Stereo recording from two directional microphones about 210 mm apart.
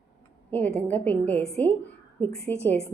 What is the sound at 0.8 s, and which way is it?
A woman's voice, 10° left (ahead or behind).